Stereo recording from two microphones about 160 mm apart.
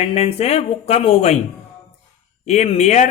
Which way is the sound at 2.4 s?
45° left (ahead or behind).